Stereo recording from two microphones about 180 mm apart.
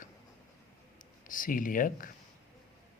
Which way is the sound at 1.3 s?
50° left (ahead or behind).